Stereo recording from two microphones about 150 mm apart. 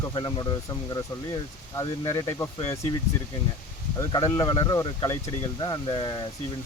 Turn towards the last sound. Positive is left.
turn(degrees=30)  # may be behind; listen again after turning